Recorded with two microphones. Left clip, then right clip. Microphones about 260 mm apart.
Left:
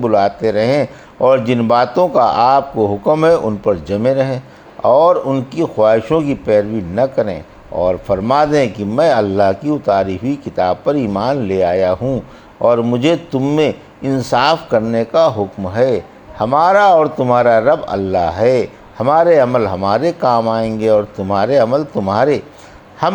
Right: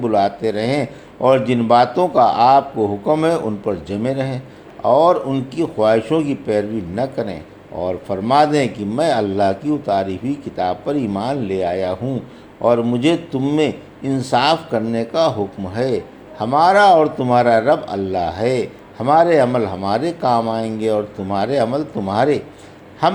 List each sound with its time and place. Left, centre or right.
0.0 s a man's voice: left